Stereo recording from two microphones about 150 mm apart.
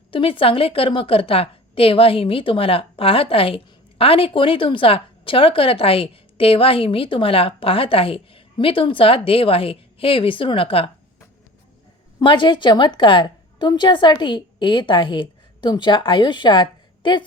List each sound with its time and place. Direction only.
0.1 s a woman's voice: 35° left (ahead or behind)
12.2 s a woman's voice: 35° left (ahead or behind)